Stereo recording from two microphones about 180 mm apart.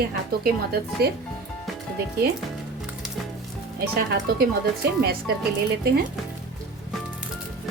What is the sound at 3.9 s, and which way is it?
A woman's voice, 60° right (ahead or behind).